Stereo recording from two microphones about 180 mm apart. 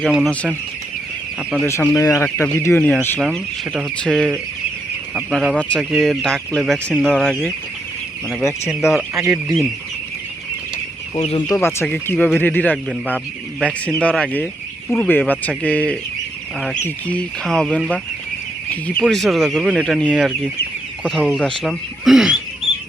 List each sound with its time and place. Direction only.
0.0 s speech: 5° right (ahead or behind)
1.4 s speech: 5° right (ahead or behind)
1.6 s speech: 15° left (ahead or behind)
3.2 s speech: 5° right (ahead or behind)
8.9 s speech: centre (ahead or behind)
11.1 s speech: 30° left (ahead or behind)
11.5 s speech: 15° left (ahead or behind)
13.8 s speech: 5° left (ahead or behind)